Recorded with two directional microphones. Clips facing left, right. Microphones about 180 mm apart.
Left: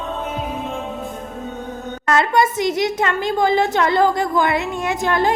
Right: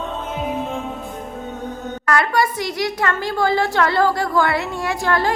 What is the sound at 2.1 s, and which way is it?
A woman's voice, 20° left (ahead or behind).